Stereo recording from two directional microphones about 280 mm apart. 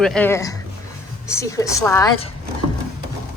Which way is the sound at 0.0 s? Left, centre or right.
Centre.